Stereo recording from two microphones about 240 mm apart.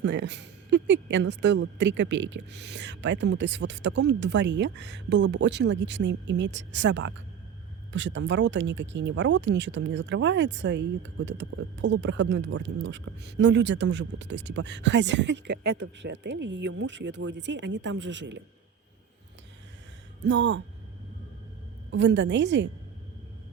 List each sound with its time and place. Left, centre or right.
0.0 s speech: right
20.2 s speech: right
21.9 s speech: right